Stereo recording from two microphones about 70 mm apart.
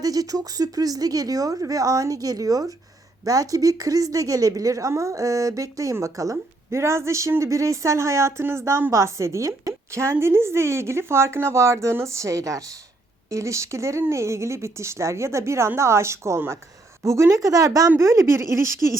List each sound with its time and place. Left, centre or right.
0.0 s speech: right